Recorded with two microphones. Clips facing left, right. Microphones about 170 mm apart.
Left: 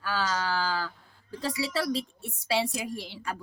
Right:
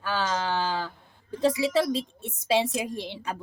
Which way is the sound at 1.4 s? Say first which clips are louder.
Right 7 dB; 20° right (ahead or behind).